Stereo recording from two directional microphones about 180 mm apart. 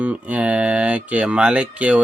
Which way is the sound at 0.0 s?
5° right (ahead or behind).